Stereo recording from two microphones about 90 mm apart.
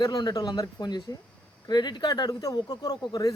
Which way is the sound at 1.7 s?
55° left (ahead or behind).